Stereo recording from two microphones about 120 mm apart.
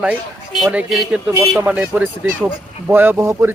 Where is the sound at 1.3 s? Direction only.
20° right (ahead or behind).